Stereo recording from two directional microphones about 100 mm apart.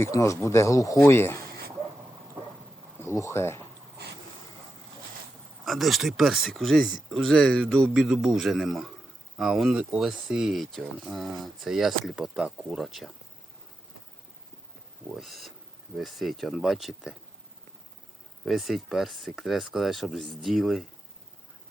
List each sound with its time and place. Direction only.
0.0 s speech: 30° left (ahead or behind)
3.0 s speech: 25° left (ahead or behind)
5.6 s speech: centre (ahead or behind)
15.1 s speech: centre (ahead or behind)
18.4 s speech: centre (ahead or behind)